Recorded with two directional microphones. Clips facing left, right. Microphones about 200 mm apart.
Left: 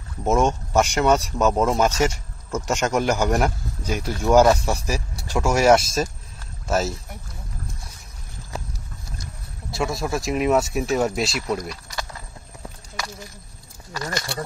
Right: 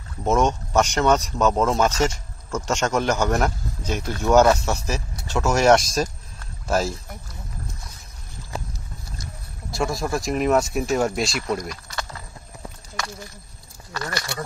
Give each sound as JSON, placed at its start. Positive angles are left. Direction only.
{"t": 0.2, "sound": "speech", "side_deg": 10}
{"t": 9.7, "sound": "speech", "side_deg": 0}
{"t": 13.9, "sound": "speech", "side_deg": 15}